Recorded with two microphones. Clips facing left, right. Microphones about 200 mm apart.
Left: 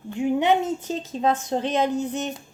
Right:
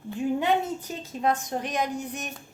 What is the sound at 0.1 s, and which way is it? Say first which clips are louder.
A woman's voice: left 4 dB; 20° left (ahead or behind).